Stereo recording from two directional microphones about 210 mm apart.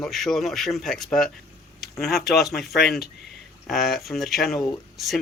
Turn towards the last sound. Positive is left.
turn(degrees=0)  # may be behind; listen again after turning